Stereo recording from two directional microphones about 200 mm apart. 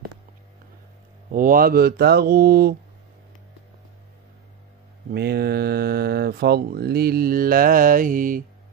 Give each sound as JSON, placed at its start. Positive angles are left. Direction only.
{"t": 1.3, "sound": "speech", "side_deg": -45}
{"t": 5.1, "sound": "speech", "side_deg": -55}